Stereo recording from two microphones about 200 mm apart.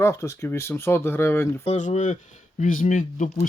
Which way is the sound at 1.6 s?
35° left (ahead or behind).